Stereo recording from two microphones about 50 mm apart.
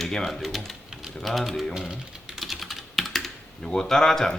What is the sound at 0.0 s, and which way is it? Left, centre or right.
Speech, centre.